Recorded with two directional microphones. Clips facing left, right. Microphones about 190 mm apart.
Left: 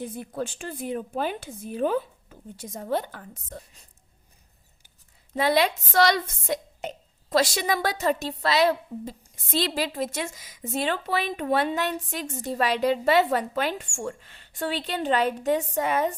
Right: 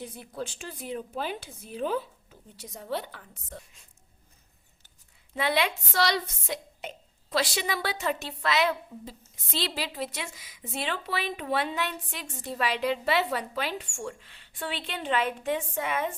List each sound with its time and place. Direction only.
0.0 s a woman's voice: 50° left (ahead or behind)
5.3 s a woman's voice: 40° left (ahead or behind)
9.3 s a woman's voice: 45° left (ahead or behind)